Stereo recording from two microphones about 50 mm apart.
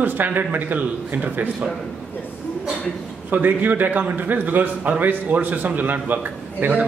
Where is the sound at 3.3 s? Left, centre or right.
Right.